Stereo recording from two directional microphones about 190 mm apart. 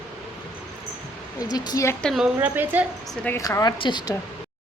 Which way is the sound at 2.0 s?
Centre (ahead or behind).